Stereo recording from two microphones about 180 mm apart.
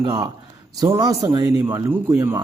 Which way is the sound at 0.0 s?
25° right (ahead or behind).